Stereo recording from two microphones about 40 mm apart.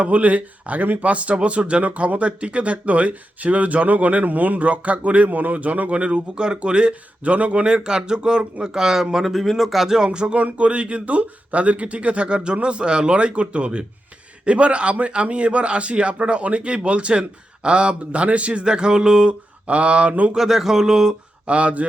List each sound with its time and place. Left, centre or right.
0.0 s a man's voice: right; by 10.1 s centre
10.1 s a man's voice: right
20.3 s speech: centre
21.4 s speech: right